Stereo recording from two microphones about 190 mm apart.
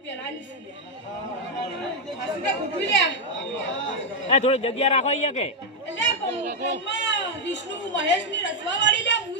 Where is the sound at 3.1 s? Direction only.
75° left (ahead or behind).